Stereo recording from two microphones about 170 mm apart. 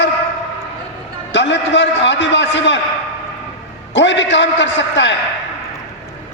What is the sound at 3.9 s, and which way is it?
A man's voice, 90° left.